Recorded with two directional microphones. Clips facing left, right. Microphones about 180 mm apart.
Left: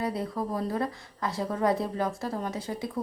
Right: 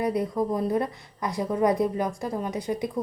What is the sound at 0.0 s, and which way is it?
A woman's voice, 15° right (ahead or behind).